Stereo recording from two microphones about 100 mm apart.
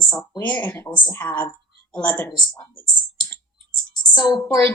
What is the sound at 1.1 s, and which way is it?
A woman's voice, 20° left (ahead or behind).